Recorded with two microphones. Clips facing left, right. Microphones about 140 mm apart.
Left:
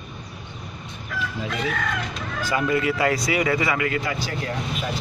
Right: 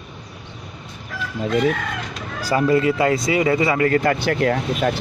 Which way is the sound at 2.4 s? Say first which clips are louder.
Right 5 dB; 35° right (ahead or behind).